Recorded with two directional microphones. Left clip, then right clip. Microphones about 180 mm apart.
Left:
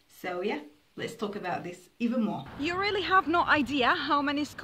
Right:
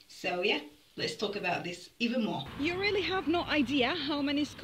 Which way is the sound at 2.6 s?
35° left (ahead or behind).